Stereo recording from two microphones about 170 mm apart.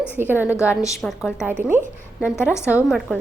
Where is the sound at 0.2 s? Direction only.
10° right (ahead or behind).